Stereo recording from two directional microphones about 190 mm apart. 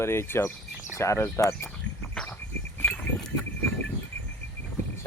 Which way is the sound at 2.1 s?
5° left (ahead or behind).